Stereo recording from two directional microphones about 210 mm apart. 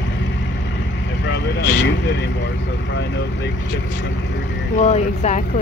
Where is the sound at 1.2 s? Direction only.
55° left (ahead or behind).